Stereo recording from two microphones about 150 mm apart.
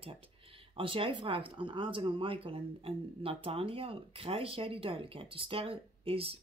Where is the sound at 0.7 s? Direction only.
35° right (ahead or behind).